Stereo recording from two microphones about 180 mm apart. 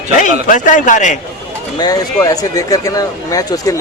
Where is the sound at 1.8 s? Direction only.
20° left (ahead or behind).